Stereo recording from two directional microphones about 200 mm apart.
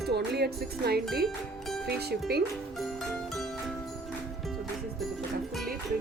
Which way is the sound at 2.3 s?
50° right (ahead or behind).